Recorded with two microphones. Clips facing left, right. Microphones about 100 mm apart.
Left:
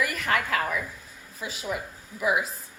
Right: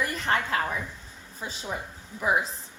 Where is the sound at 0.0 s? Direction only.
30° right (ahead or behind).